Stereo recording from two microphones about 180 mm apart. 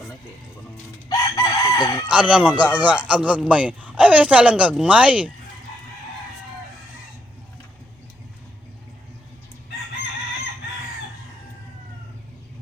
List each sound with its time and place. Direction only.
1.1 s chicken: 20° left (ahead or behind)
2.0 s a man's voice: 5° right (ahead or behind)